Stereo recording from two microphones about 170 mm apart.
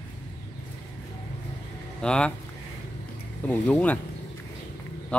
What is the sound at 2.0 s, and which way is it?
Speech, 5° left (ahead or behind).